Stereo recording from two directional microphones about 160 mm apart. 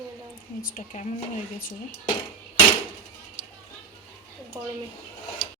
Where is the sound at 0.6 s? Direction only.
60° left (ahead or behind).